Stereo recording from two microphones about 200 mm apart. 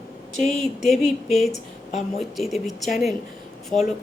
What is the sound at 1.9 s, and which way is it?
Speech, 35° left (ahead or behind).